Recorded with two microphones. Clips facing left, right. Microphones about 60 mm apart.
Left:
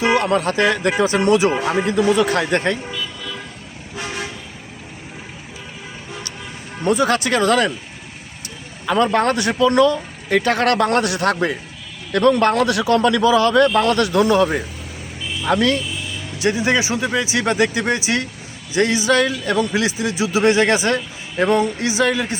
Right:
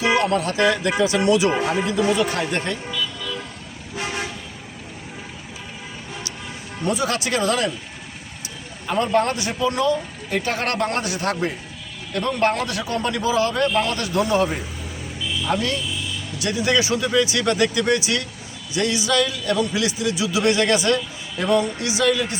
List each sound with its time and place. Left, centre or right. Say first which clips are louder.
0.0 s a man's voice: left 2 dB; left
1.6 s speech: left 3 dB; left
6.8 s speech: left 6 dB; left
8.9 s speech: left 3 dB; left
16.4 s a man's voice: left 3 dB; left